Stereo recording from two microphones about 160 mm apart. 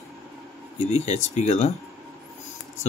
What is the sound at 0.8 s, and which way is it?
Speech, 45° left (ahead or behind).